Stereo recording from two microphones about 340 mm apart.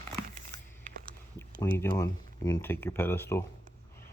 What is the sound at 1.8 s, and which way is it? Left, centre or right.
Speech, centre.